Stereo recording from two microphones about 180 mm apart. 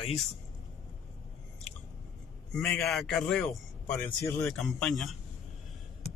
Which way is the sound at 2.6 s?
5° left (ahead or behind).